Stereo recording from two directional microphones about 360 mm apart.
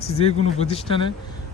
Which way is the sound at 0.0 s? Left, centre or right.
Centre.